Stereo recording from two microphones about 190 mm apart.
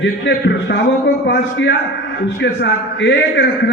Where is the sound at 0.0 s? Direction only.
65° left (ahead or behind).